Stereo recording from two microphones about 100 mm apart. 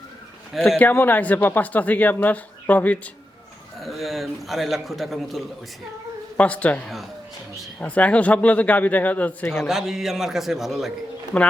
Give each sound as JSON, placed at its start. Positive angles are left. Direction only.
{"t": 0.8, "sound": "speech", "side_deg": 20}
{"t": 3.8, "sound": "a man's voice", "side_deg": 0}
{"t": 6.3, "sound": "speech", "side_deg": 15}
{"t": 9.6, "sound": "a man's voice", "side_deg": -5}
{"t": 11.3, "sound": "speech", "side_deg": 15}